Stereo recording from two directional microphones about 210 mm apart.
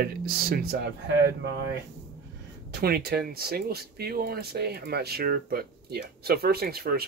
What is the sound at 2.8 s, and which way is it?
Speech, 45° right (ahead or behind).